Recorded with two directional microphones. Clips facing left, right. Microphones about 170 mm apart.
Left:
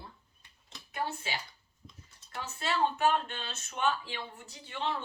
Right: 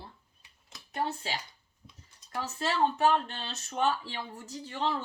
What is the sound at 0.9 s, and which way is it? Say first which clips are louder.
Speech: right 3 dB; 40° right (ahead or behind).